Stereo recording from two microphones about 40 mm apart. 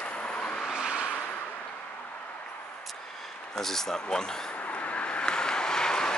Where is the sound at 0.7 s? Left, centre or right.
Right.